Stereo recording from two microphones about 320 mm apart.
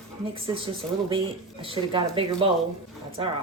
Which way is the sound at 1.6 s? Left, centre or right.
Centre.